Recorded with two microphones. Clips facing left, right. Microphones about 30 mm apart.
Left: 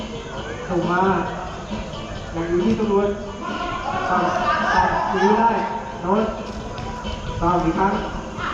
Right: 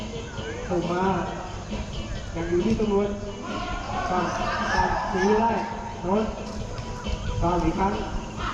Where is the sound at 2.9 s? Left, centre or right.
Left.